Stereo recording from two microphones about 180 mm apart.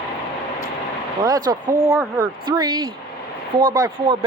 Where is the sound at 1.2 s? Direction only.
20° right (ahead or behind).